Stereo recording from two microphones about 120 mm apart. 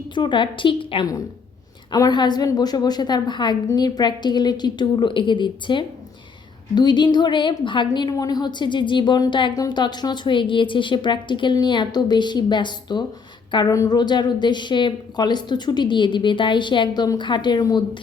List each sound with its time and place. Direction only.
0.1 s a woman's voice: 40° left (ahead or behind)